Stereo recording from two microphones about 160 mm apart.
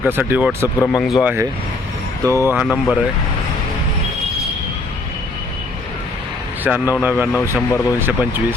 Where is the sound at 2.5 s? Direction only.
5° right (ahead or behind).